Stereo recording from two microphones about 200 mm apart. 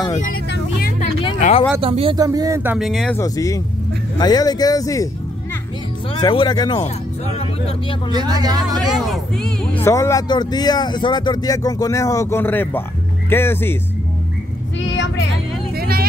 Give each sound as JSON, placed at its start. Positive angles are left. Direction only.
{"t": 0.1, "sound": "speech", "side_deg": 40}
{"t": 0.5, "sound": "speech", "side_deg": 50}
{"t": 0.9, "sound": "music", "side_deg": 30}
{"t": 1.8, "sound": "speech", "side_deg": -30}
{"t": 3.2, "sound": "speech", "side_deg": 15}
{"t": 6.1, "sound": "speech", "side_deg": 20}
{"t": 8.1, "sound": "speech", "side_deg": -20}
{"t": 8.6, "sound": "speech", "side_deg": 0}
{"t": 9.8, "sound": "speech", "side_deg": 15}
{"t": 14.8, "sound": "vehicle", "side_deg": 65}
{"t": 15.7, "sound": "vehicle", "side_deg": -50}